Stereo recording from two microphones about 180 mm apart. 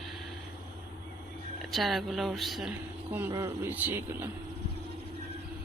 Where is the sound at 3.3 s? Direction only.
15° right (ahead or behind).